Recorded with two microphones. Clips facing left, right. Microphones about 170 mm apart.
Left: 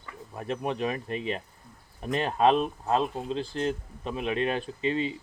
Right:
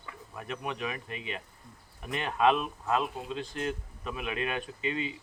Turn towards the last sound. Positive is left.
turn(degrees=30)  # may be behind; listen again after turning